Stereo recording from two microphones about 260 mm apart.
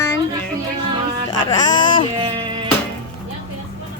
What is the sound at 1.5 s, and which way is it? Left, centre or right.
Speech, centre.